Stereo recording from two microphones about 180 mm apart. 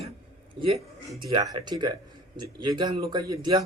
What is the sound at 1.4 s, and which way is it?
Speech, 20° right (ahead or behind).